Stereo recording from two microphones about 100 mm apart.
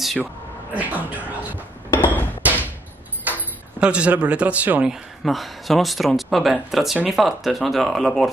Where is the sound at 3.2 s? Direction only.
15° right (ahead or behind).